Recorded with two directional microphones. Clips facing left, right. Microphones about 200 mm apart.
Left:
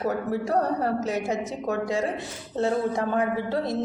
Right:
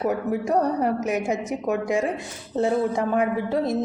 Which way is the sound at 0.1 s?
15° right (ahead or behind).